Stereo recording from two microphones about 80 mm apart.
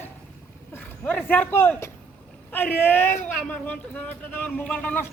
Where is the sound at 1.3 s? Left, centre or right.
Left.